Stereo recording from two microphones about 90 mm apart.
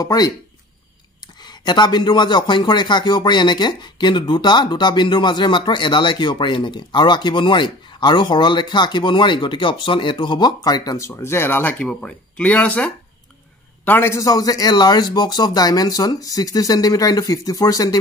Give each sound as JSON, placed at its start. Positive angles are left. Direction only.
{"t": 0.0, "sound": "a man's voice", "side_deg": 45}
{"t": 11.0, "sound": "speech", "side_deg": 30}
{"t": 13.8, "sound": "a man's voice", "side_deg": 25}